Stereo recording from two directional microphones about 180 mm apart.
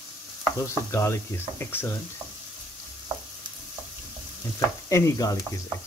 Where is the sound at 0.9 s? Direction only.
15° left (ahead or behind).